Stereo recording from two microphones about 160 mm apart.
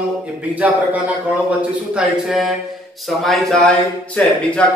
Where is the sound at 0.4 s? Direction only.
10° right (ahead or behind).